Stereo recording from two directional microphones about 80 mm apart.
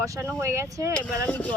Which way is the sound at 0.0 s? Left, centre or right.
Right.